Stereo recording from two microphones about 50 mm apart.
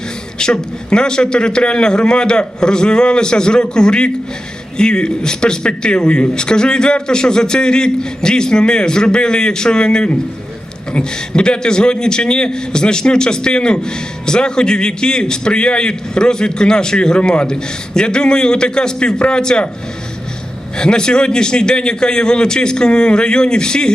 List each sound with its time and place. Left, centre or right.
0.3 s a man's voice: centre
20.7 s a man's voice: centre